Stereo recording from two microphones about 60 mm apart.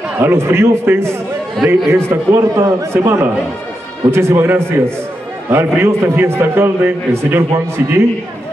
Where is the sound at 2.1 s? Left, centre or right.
Right.